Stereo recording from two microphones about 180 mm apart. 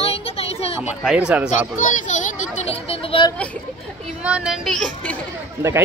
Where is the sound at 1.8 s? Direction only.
45° left (ahead or behind).